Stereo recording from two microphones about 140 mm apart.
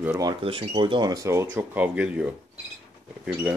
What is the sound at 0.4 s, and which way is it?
Speech, 40° right (ahead or behind).